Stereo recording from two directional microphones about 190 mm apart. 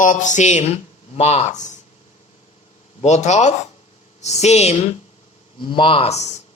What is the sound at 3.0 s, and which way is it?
A man's voice, 35° left (ahead or behind).